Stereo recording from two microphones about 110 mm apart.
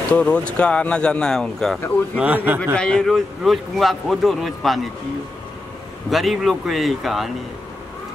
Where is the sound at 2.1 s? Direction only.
15° right (ahead or behind).